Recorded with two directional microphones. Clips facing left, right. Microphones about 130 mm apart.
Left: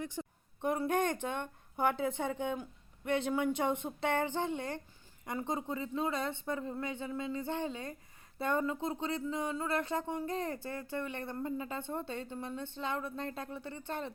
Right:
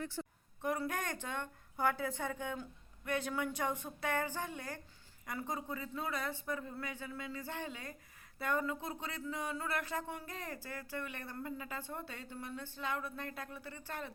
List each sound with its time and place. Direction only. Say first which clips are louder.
0.0 s speech: left 2 dB; 15° left (ahead or behind)